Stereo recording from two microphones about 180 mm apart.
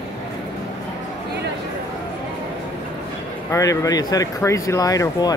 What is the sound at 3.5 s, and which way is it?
Speech, 20° left (ahead or behind).